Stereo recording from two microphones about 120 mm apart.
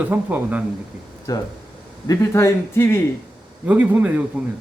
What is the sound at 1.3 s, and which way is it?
A man's voice, 30° left (ahead or behind).